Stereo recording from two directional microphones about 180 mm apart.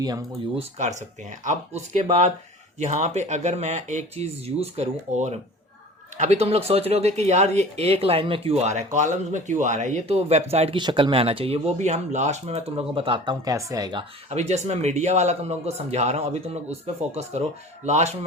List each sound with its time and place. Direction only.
0.0 s speech: 20° right (ahead or behind)
0.8 s speech: 40° right (ahead or behind); by 14.0 s 20° right (ahead or behind)
14.3 s speech: 40° right (ahead or behind)